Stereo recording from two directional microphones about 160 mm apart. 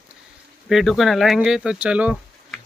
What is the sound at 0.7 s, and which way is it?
Music, centre (ahead or behind).